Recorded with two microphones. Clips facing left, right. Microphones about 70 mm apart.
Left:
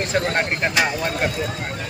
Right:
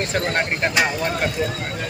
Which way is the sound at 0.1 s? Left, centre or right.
Centre.